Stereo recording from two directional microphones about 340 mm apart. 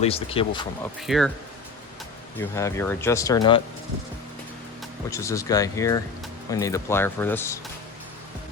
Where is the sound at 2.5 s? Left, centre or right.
Centre.